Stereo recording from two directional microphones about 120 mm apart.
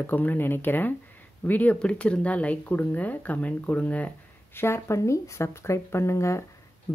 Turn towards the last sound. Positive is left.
turn(degrees=30)  # may be behind; listen again after turning